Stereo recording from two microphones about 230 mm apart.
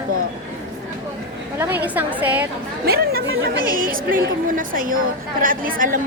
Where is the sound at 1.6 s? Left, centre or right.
Centre.